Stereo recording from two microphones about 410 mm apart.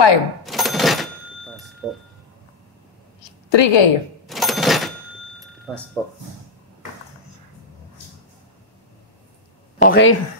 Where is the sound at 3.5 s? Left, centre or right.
Left.